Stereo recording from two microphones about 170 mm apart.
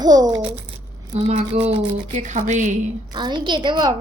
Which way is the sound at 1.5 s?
40° right (ahead or behind).